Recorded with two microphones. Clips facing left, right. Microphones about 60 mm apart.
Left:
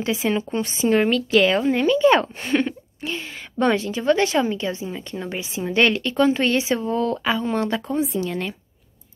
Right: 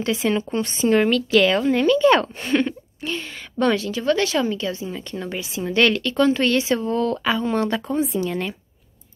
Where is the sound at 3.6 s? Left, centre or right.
Left.